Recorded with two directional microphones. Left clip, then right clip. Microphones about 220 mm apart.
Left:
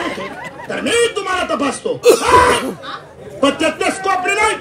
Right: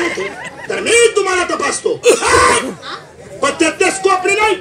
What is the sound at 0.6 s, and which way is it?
A woman's voice, 45° left (ahead or behind).